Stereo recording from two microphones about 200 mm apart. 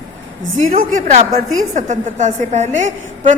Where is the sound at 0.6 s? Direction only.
40° right (ahead or behind).